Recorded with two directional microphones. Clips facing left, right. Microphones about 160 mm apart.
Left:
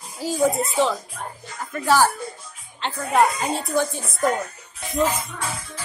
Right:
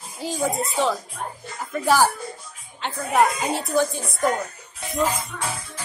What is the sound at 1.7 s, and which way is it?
Speech, 15° right (ahead or behind).